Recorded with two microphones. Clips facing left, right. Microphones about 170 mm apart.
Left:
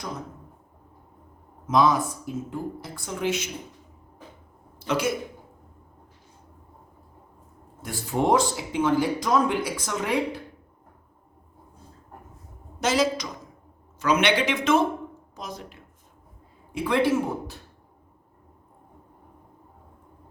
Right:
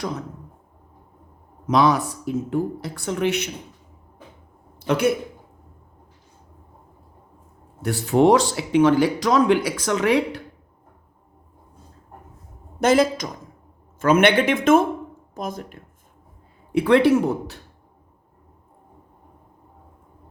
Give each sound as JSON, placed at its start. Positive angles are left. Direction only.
{"t": 1.6, "sound": "speech", "side_deg": -70}
{"t": 4.9, "sound": "a man's voice", "side_deg": -60}
{"t": 7.8, "sound": "speech", "side_deg": -70}
{"t": 12.8, "sound": "speech", "side_deg": -55}
{"t": 16.7, "sound": "speech", "side_deg": -70}